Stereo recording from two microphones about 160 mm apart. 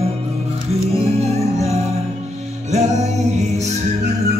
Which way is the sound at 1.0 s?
40° right (ahead or behind).